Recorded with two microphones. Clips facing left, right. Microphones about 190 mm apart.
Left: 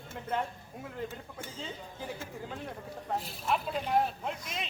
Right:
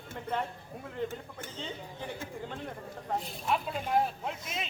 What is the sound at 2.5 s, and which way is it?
A man's voice, centre (ahead or behind).